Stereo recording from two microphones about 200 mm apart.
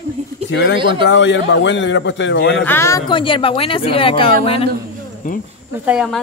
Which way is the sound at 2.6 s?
10° left (ahead or behind).